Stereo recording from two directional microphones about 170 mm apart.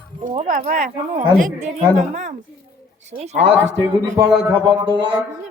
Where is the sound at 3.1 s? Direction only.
45° right (ahead or behind).